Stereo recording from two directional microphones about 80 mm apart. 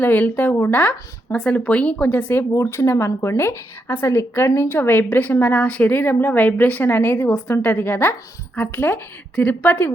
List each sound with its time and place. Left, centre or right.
0.0 s a woman's voice: left